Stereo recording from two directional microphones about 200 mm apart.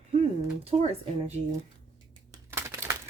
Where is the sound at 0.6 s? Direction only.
30° right (ahead or behind).